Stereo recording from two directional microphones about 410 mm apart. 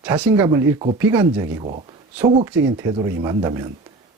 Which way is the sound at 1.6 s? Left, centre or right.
Centre.